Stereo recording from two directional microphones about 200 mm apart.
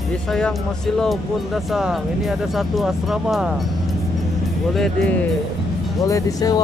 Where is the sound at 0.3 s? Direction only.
Centre (ahead or behind).